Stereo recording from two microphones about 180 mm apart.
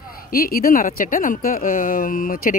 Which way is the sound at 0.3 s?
55° left (ahead or behind).